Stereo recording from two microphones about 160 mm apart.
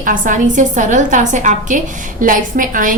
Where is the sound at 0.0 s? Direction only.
55° right (ahead or behind).